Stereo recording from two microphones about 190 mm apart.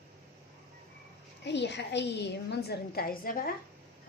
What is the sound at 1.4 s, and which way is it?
A woman's voice, 65° left (ahead or behind).